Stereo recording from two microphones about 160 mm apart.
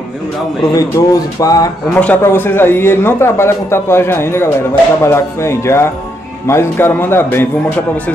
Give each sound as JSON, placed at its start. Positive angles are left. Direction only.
{"t": 0.7, "sound": "speech", "side_deg": 20}
{"t": 2.0, "sound": "a man's voice", "side_deg": 10}